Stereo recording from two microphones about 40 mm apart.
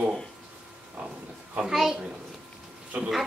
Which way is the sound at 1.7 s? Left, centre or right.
Centre.